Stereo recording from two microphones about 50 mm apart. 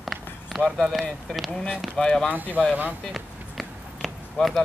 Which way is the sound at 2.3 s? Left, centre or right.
Right.